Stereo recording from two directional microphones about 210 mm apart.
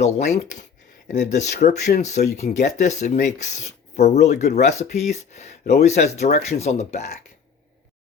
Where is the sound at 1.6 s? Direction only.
40° left (ahead or behind).